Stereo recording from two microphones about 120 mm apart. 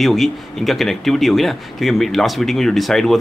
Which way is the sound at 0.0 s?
Centre (ahead or behind).